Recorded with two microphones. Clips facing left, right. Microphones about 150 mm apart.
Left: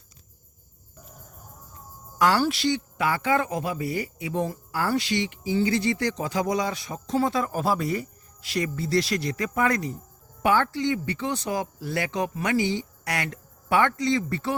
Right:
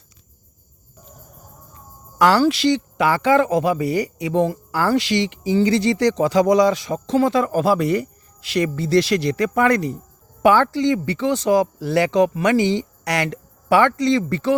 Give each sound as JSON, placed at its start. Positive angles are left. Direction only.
{"t": 2.1, "sound": "speech", "side_deg": -80}
{"t": 10.4, "sound": "speech", "side_deg": -90}